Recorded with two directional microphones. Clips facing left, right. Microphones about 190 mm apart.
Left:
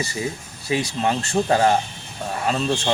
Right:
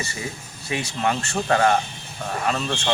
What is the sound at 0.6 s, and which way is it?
Speech, 35° left (ahead or behind).